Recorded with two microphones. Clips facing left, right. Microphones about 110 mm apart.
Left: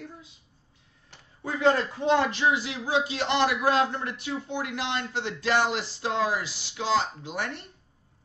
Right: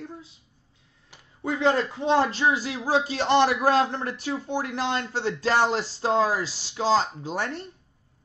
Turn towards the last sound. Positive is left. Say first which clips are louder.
# right 4 dB
turn(degrees=-35)  # may be behind; listen again after turning